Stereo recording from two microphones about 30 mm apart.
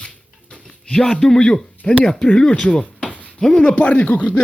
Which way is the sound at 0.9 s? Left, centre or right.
Centre.